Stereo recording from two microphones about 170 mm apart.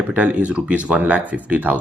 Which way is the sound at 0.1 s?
10° right (ahead or behind).